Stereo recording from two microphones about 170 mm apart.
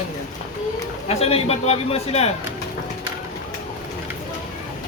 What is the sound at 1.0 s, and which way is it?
A man's voice, 35° left (ahead or behind).